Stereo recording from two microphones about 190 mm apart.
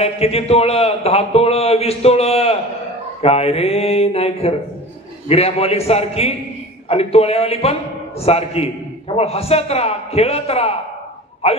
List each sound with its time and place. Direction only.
0.0 s a man's voice: 30° left (ahead or behind)